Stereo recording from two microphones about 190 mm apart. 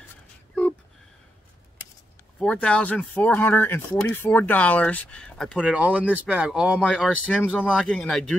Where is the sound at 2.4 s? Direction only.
5° left (ahead or behind).